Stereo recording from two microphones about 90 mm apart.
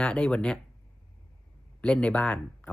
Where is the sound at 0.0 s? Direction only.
10° left (ahead or behind).